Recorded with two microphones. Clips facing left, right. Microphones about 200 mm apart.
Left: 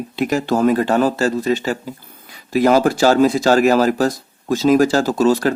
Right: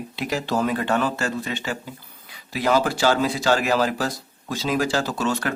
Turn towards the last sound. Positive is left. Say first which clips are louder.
# left 10 dB
turn(degrees=35)  # may be behind; listen again after turning